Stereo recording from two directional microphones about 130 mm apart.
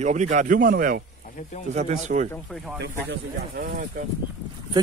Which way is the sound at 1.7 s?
65° right (ahead or behind).